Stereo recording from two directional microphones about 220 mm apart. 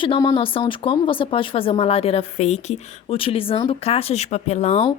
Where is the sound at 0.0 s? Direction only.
25° left (ahead or behind).